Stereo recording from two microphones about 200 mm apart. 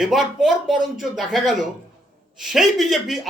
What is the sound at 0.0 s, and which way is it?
A man's voice, centre (ahead or behind).